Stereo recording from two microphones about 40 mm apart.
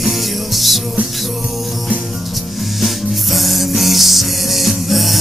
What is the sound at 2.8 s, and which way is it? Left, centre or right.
Music, centre.